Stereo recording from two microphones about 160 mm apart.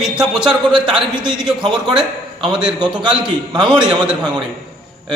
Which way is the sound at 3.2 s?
30° right (ahead or behind).